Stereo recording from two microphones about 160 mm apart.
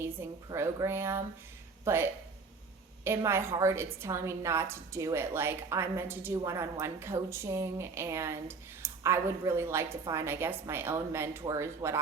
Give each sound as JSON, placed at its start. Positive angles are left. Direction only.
{"t": 0.0, "sound": "a woman's voice", "side_deg": -15}